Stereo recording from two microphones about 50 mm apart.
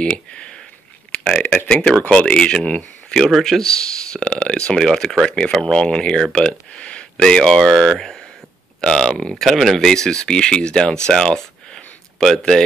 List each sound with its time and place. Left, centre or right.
0.0 s speech: left
1.1 s a sound: left
1.7 s speech: centre
3.3 s speech: centre
9.3 s speech: centre
11.1 s a sound: centre